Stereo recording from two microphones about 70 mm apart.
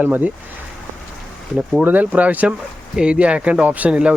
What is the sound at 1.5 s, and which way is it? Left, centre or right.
Speech, centre.